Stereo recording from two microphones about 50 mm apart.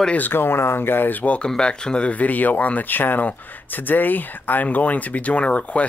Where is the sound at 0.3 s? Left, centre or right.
Left.